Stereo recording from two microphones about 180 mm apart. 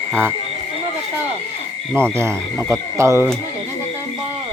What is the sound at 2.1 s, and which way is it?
Speech, 15° right (ahead or behind).